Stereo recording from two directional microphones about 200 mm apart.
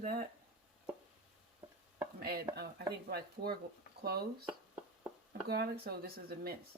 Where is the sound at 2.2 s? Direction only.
50° right (ahead or behind).